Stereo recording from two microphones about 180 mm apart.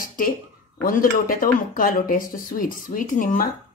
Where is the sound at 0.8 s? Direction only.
50° left (ahead or behind).